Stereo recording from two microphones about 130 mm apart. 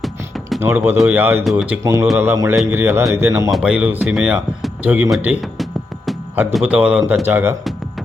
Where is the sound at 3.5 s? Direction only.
5° right (ahead or behind).